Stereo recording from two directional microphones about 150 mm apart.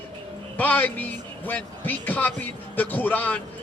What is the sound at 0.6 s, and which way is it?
A man's voice, 10° left (ahead or behind).